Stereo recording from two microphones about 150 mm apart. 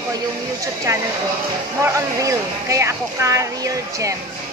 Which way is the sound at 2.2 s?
20° right (ahead or behind).